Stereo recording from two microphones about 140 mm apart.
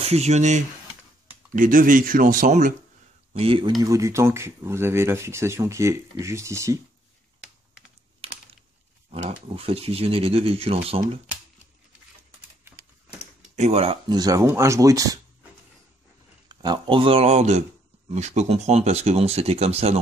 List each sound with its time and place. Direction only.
0.0 s speech: 50° right (ahead or behind)
1.5 s speech: 75° right (ahead or behind)
3.3 s speech: 40° right (ahead or behind)
3.8 s speech: 20° right (ahead or behind)
8.2 s typing: 45° right (ahead or behind)
9.6 s speech: 45° right (ahead or behind)
13.6 s speech: 50° right (ahead or behind)
14.0 s speech: 30° right (ahead or behind)
16.4 s speech: 30° right (ahead or behind); by 20.0 s 45° right (ahead or behind)